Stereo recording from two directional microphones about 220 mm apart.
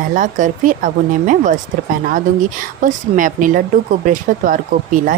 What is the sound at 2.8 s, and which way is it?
Speech, 35° right (ahead or behind).